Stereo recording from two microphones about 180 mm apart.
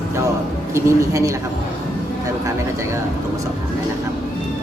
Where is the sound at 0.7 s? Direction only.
15° right (ahead or behind).